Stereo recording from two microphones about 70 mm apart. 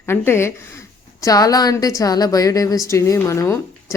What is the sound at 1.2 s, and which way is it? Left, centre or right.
A woman's voice, left.